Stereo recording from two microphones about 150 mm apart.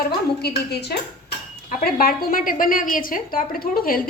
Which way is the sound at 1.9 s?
75° left (ahead or behind).